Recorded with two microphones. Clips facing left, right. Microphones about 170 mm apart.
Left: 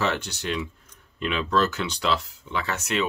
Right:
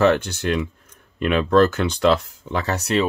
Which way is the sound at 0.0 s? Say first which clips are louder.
Right 9 dB; 55° right (ahead or behind).